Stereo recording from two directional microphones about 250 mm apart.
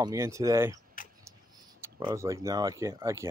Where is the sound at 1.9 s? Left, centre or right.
Centre.